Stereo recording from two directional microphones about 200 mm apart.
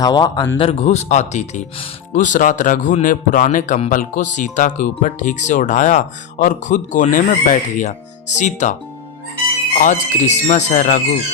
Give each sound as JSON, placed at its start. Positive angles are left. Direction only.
{"t": 0.0, "sound": "speech", "side_deg": 20}
{"t": 9.8, "sound": "speech", "side_deg": 35}